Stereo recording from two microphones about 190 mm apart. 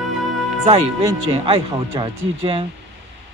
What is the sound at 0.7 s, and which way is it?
Speech, 30° right (ahead or behind).